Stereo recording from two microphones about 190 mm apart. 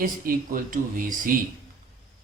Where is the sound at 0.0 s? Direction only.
45° right (ahead or behind).